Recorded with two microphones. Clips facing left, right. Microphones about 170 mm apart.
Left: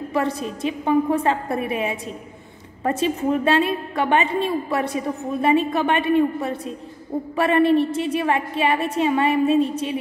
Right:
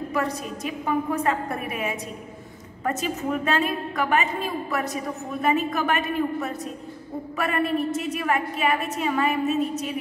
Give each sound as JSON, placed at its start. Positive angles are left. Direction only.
{"t": 0.1, "sound": "a woman's voice", "side_deg": 30}